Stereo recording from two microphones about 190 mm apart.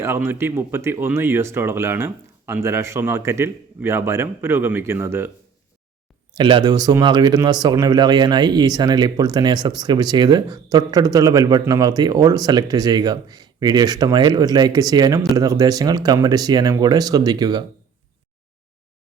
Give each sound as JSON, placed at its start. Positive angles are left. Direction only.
{"t": 0.0, "sound": "speech", "side_deg": -10}
{"t": 6.3, "sound": "speech", "side_deg": -25}